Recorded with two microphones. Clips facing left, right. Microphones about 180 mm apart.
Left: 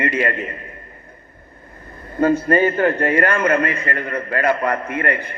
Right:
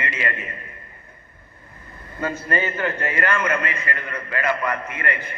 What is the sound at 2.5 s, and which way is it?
A man's voice, 55° left (ahead or behind).